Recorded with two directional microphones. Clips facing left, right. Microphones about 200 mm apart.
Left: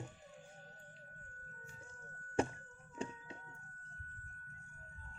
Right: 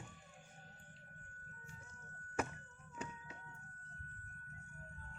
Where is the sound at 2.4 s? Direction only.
30° left (ahead or behind).